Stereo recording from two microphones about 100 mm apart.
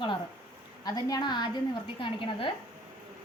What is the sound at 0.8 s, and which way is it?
Speech, 40° left (ahead or behind).